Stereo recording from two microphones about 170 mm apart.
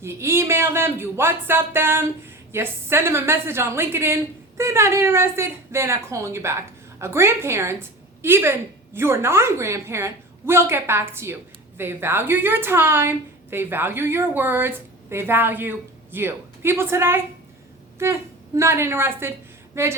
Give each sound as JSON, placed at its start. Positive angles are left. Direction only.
{"t": 0.0, "sound": "a woman's voice", "side_deg": -15}